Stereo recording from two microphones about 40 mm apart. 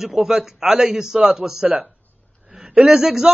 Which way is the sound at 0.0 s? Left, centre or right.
Centre.